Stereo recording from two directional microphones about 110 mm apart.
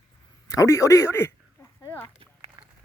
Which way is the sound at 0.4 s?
30° left (ahead or behind).